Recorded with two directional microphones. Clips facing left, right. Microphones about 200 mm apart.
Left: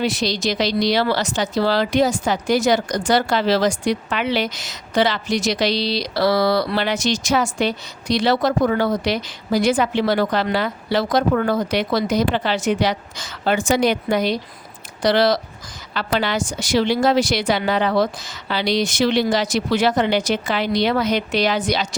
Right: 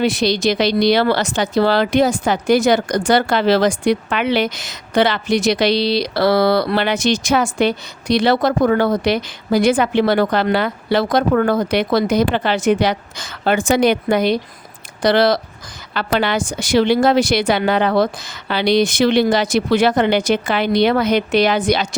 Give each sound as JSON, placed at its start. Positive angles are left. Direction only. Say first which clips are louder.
{"t": 0.0, "sound": "speech", "louder": "right 5 dB", "side_deg": -60}